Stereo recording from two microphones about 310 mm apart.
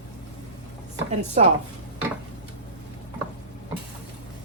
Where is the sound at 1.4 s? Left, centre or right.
Right.